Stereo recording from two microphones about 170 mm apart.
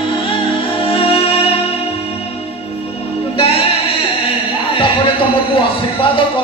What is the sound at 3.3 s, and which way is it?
Music, 35° left (ahead or behind).